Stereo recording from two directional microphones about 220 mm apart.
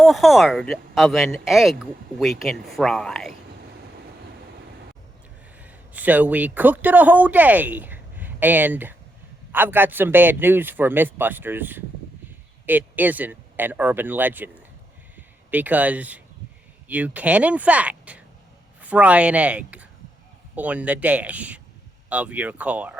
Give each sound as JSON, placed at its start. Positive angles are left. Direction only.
{"t": 0.0, "sound": "speech", "side_deg": 0}
{"t": 5.6, "sound": "a man's voice", "side_deg": -5}